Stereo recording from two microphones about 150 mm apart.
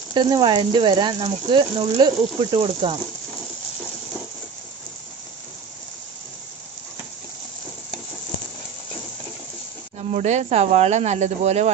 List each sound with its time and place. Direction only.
0.1 s speech: 30° right (ahead or behind)
9.9 s speech: 50° right (ahead or behind)